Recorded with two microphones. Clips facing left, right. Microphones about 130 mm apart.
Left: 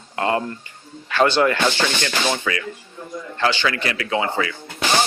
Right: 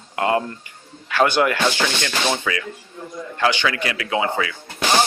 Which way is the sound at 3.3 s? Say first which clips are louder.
Right 1 dB; 15° right (ahead or behind).